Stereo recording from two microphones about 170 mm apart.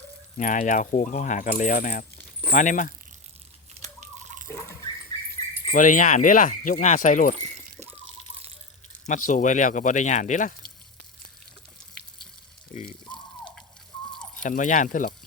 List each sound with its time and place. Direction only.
0.3 s speech: 50° left (ahead or behind)
3.8 s a sound: 45° right (ahead or behind)
5.7 s speech: 50° left (ahead or behind)
9.0 s speech: 50° left (ahead or behind)
12.7 s a sound: 50° left (ahead or behind)
14.4 s speech: 50° left (ahead or behind)